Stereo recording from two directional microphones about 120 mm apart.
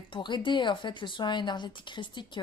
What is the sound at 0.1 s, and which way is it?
Speech, 40° left (ahead or behind).